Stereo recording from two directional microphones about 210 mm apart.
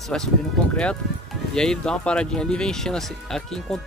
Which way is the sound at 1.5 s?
5° left (ahead or behind).